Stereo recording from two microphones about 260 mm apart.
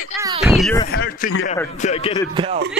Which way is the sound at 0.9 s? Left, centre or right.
Left.